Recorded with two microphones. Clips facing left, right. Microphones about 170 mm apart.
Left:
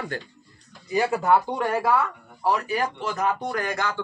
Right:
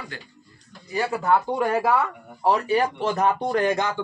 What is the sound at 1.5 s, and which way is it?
Speech, 5° right (ahead or behind).